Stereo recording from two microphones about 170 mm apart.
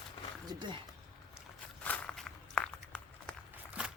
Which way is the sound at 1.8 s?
10° left (ahead or behind).